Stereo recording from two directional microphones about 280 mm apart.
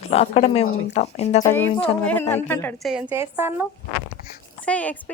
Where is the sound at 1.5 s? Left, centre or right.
Centre.